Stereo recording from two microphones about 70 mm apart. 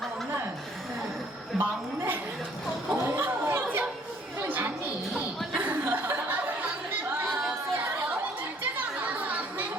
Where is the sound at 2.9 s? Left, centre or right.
Right.